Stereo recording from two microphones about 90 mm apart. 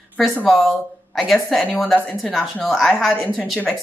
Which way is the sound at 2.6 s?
Centre (ahead or behind).